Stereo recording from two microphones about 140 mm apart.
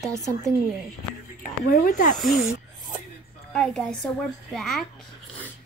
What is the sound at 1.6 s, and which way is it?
Speech, 90° left.